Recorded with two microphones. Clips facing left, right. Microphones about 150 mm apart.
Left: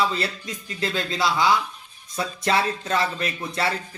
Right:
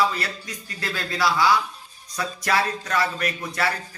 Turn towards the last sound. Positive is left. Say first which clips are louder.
# even
turn(degrees=25)  # may be behind; listen again after turning